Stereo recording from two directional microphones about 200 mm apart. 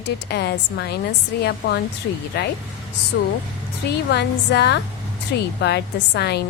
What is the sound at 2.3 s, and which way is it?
A woman's voice, 55° left (ahead or behind).